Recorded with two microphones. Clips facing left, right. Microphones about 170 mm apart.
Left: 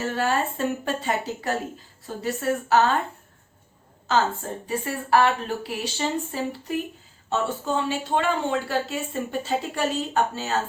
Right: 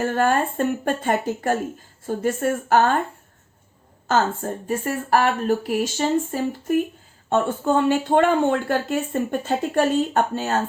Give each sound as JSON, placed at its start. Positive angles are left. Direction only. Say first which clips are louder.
{"t": 0.0, "sound": "speech", "louder": "right 4 dB", "side_deg": -55}
{"t": 4.0, "sound": "speech", "louder": "right 2 dB", "side_deg": -50}